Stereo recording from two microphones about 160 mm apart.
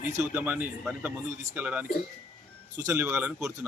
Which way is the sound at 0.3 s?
10° right (ahead or behind).